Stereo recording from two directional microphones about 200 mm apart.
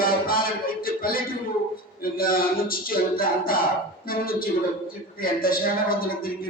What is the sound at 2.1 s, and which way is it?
Speech, 45° left (ahead or behind).